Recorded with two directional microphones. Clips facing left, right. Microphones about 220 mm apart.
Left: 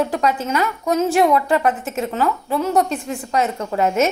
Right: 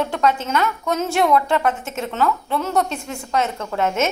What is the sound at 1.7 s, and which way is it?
Speech, 35° left (ahead or behind).